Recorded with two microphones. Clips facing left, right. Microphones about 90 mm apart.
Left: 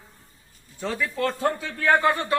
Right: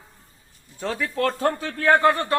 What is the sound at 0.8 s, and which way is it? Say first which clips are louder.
Speech: right 2 dB; 50° right (ahead or behind).